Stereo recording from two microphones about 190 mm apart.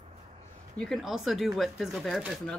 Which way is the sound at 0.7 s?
Centre (ahead or behind).